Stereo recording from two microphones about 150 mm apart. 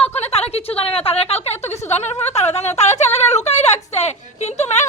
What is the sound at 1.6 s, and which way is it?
Speech, 15° left (ahead or behind).